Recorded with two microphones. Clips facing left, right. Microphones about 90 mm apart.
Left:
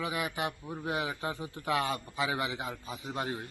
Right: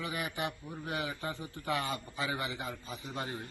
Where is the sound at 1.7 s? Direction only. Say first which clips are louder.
Left 4 dB; 70° left (ahead or behind).